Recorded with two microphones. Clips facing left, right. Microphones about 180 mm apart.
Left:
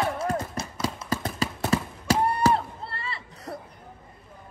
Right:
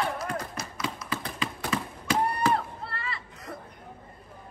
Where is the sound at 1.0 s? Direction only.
40° left (ahead or behind).